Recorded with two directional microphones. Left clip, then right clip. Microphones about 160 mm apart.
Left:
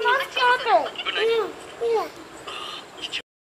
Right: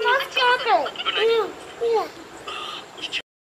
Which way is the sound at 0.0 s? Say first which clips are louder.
Right 1 dB; 20° left (ahead or behind).